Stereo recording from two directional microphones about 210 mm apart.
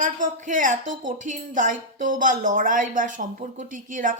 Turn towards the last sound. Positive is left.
turn(degrees=-40)  # may be behind; listen again after turning